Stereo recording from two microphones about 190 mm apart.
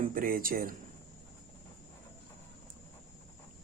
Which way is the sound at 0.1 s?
45° right (ahead or behind).